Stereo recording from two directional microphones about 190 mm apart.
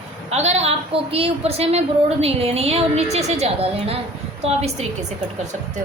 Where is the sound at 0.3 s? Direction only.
35° right (ahead or behind).